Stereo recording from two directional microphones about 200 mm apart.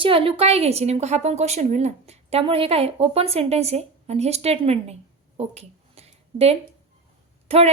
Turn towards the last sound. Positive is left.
turn(degrees=-30)  # may be behind; listen again after turning